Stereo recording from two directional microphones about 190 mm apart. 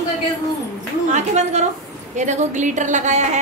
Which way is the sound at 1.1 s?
35° right (ahead or behind).